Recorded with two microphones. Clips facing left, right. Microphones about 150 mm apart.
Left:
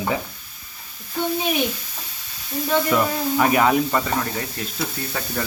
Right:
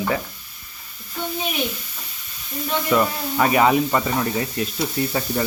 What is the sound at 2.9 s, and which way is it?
Speech, centre (ahead or behind).